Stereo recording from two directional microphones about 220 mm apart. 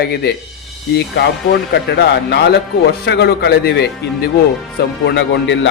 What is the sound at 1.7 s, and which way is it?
A man's voice, 50° left (ahead or behind).